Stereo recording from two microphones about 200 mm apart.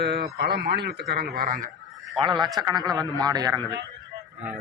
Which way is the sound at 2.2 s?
25° right (ahead or behind).